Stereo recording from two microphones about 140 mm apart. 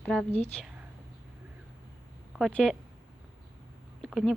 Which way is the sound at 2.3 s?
5° left (ahead or behind).